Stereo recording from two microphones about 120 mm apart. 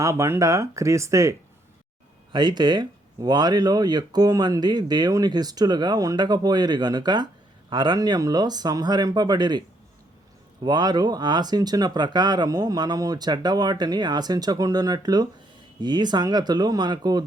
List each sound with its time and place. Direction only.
0.0 s speech: 25° right (ahead or behind)
2.3 s speech: 40° right (ahead or behind)